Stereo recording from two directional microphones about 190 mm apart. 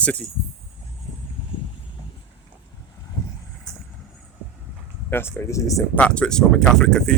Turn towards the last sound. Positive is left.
turn(degrees=5)  # may be behind; listen again after turning